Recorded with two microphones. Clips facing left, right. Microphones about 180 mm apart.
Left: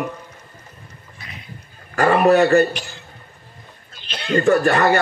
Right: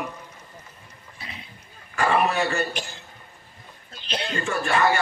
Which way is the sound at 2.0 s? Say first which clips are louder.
Left 8 dB; 40° left (ahead or behind).